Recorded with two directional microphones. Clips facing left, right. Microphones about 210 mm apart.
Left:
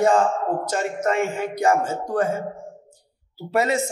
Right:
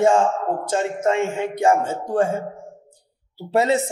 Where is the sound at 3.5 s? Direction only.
30° right (ahead or behind).